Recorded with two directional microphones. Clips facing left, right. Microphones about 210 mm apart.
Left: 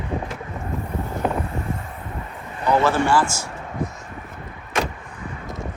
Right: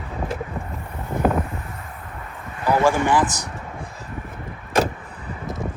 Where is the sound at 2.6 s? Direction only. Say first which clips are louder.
Even; 10° right (ahead or behind).